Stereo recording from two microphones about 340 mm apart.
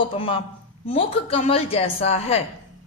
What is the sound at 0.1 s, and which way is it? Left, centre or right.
Speech, centre.